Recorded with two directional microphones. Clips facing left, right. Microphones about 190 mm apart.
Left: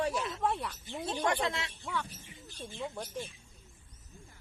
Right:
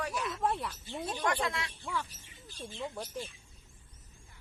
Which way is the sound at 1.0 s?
25° left (ahead or behind).